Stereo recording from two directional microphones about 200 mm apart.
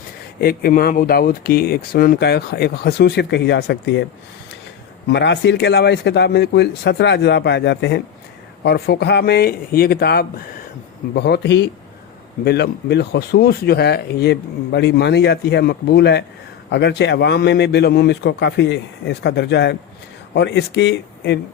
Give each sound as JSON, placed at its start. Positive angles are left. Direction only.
{"t": 0.3, "sound": "speech", "side_deg": 50}
{"t": 5.0, "sound": "speech", "side_deg": 60}